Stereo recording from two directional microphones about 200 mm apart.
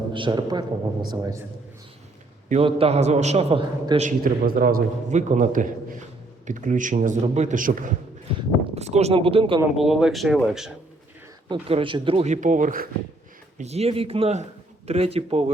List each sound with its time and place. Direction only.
0.1 s a man's voice: 25° right (ahead or behind)
2.5 s a man's voice: 30° right (ahead or behind)
9.7 s speech: centre (ahead or behind)
11.4 s a man's voice: 25° right (ahead or behind); by 12.9 s 45° right (ahead or behind)
13.6 s a man's voice: 30° right (ahead or behind)